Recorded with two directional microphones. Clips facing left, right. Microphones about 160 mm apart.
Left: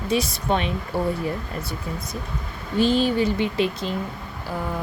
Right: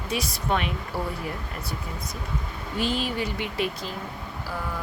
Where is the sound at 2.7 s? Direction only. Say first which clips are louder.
Left 8 dB; 30° left (ahead or behind).